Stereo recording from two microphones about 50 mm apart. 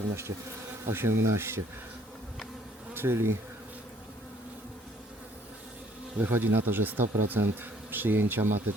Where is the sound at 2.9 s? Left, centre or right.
Right.